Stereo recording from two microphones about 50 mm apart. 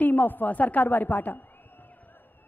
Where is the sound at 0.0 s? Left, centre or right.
Left.